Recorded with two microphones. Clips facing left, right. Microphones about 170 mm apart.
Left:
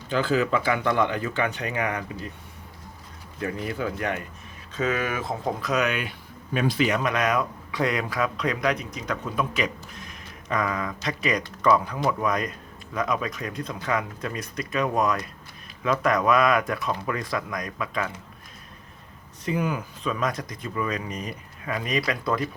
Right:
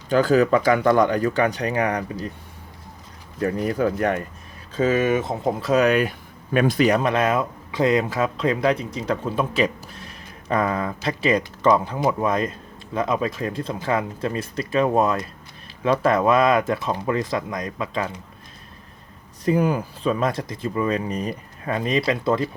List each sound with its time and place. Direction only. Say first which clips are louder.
0.1 s speech: right 6 dB; 45° right (ahead or behind)
3.4 s speech: right 7 dB; 40° right (ahead or behind)
4.7 s speech: right 7 dB; 30° right (ahead or behind)
6.5 s speech: right 5 dB; 50° right (ahead or behind); by 18.1 s 25° right (ahead or behind)
19.5 s speech: right 7 dB; 35° right (ahead or behind)